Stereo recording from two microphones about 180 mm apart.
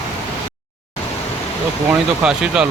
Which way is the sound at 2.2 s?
5° right (ahead or behind).